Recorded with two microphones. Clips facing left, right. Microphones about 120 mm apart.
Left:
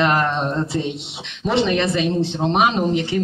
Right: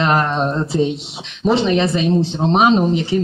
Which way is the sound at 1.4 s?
25° right (ahead or behind).